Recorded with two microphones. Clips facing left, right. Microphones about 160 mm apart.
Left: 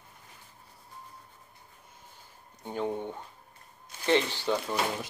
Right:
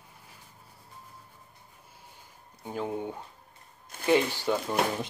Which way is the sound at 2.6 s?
5° right (ahead or behind).